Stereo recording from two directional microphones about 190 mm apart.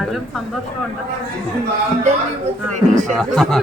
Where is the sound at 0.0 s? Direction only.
Centre (ahead or behind).